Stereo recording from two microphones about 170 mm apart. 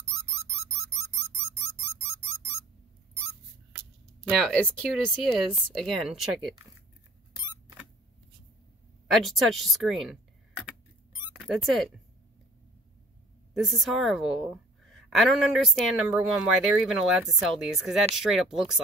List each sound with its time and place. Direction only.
4.3 s speech: 5° left (ahead or behind)
9.1 s speech: centre (ahead or behind)
11.3 s speech: centre (ahead or behind)
13.5 s a woman's voice: centre (ahead or behind)